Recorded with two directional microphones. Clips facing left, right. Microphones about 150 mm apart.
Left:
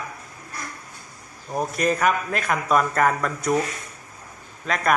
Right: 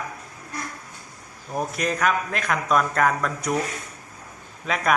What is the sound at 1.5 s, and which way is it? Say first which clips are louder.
A man's voice: left 3 dB; centre (ahead or behind).